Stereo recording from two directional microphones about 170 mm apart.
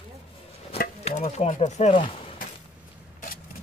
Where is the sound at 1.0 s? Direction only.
40° left (ahead or behind).